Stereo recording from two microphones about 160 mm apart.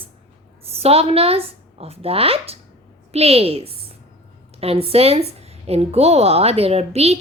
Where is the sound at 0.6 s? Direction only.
40° right (ahead or behind).